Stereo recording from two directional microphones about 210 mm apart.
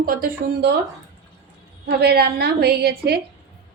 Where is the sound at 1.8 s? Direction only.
50° right (ahead or behind).